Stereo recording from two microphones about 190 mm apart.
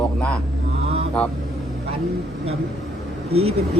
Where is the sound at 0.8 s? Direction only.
35° right (ahead or behind).